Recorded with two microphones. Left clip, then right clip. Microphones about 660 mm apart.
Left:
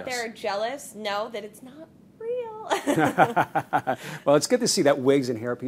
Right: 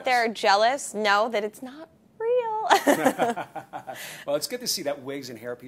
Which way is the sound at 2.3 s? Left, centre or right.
Right.